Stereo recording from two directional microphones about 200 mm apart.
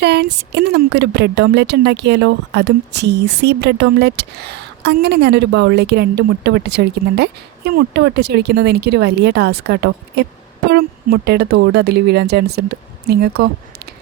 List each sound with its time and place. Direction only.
0.0 s a woman's voice: 55° right (ahead or behind)